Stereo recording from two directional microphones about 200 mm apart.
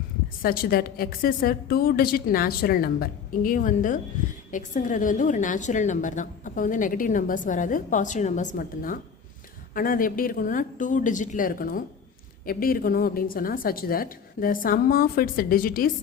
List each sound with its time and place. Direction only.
0.4 s a woman's voice: 50° left (ahead or behind)